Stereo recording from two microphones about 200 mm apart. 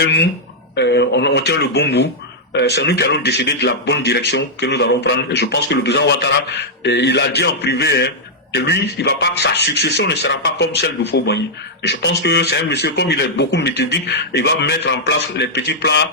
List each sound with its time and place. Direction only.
0.0 s speech: 55° left (ahead or behind)